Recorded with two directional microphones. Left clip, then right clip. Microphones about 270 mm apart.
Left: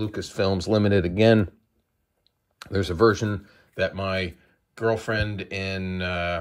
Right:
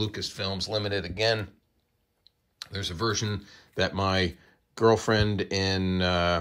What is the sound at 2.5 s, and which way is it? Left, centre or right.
Speech, centre.